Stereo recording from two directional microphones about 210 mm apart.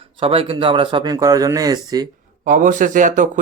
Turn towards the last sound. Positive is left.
turn(degrees=-35)  # may be behind; listen again after turning